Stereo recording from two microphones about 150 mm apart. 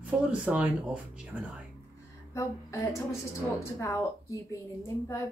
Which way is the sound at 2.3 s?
20° left (ahead or behind).